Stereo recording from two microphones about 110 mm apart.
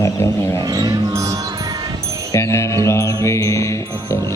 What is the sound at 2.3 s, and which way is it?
Music, 25° left (ahead or behind).